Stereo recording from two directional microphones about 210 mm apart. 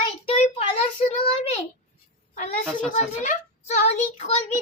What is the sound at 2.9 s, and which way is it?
A child's voice, 35° left (ahead or behind).